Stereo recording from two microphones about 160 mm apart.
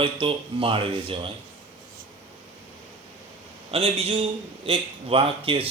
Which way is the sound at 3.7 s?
35° right (ahead or behind).